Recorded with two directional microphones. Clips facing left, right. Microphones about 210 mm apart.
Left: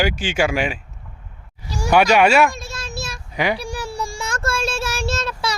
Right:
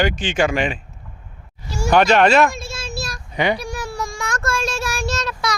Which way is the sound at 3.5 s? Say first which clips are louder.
Even; 30° left (ahead or behind).